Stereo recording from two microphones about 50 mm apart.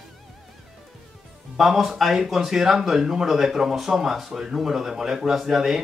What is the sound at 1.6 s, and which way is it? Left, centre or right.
Speech, centre.